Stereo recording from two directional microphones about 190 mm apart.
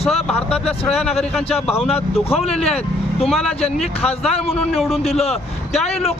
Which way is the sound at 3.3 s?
5° left (ahead or behind).